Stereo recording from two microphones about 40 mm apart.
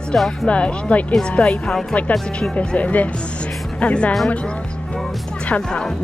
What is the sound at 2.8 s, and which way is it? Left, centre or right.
Speech, left.